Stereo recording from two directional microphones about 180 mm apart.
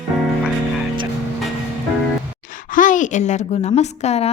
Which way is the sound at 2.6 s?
45° left (ahead or behind).